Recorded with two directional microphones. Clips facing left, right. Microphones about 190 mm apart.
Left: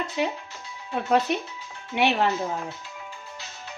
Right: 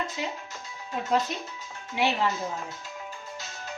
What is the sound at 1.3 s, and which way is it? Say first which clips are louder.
Speech: left 7 dB; 65° left (ahead or behind).